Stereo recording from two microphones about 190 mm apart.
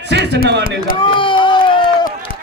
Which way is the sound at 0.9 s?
25° left (ahead or behind).